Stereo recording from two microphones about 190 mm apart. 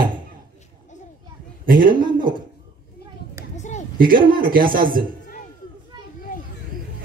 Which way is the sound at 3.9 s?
50° right (ahead or behind).